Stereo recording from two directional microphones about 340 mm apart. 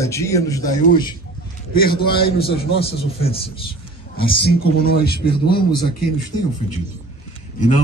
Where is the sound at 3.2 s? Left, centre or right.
Centre.